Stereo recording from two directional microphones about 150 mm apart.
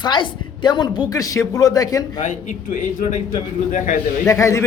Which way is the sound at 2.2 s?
55° left (ahead or behind).